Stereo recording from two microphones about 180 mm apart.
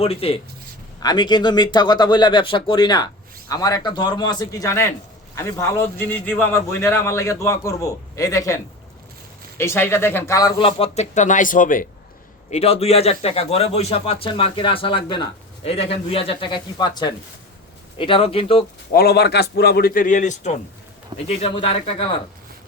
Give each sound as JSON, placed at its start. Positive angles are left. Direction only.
{"t": 0.0, "sound": "a man's voice", "side_deg": 35}
{"t": 9.6, "sound": "a man's voice", "side_deg": 15}
{"t": 12.5, "sound": "a man's voice", "side_deg": 35}
{"t": 18.9, "sound": "a man's voice", "side_deg": 60}
{"t": 21.1, "sound": "a man's voice", "side_deg": -25}
{"t": 21.4, "sound": "a man's voice", "side_deg": 30}